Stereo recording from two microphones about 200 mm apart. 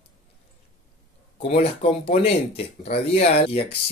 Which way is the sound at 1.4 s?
30° left (ahead or behind).